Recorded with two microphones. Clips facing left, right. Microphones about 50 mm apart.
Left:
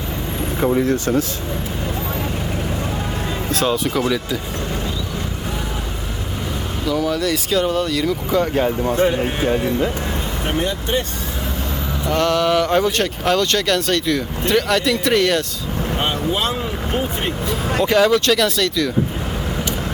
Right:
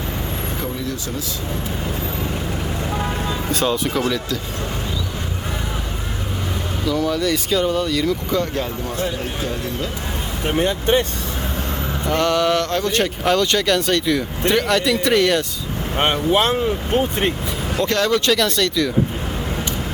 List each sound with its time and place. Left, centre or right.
0.6 s speech: left
3.5 s speech: centre
6.8 s speech: centre
8.3 s speech: centre; by 9.9 s left
12.0 s speech: centre
12.6 s speech: centre
12.9 s speech: centre
16.0 s speech: right
17.8 s speech: centre